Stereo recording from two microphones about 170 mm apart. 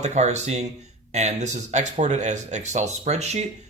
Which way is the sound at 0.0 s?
40° right (ahead or behind).